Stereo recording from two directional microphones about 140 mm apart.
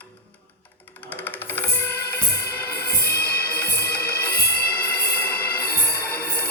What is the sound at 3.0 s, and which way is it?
Music, 90° left.